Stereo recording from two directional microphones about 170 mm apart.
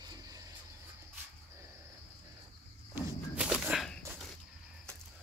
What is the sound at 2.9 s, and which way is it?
Whip, 5° right (ahead or behind).